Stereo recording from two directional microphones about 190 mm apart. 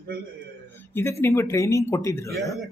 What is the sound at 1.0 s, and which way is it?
Speech, 15° left (ahead or behind).